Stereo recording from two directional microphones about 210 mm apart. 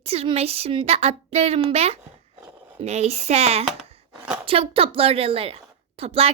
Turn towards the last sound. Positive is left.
turn(degrees=-30)  # may be behind; listen again after turning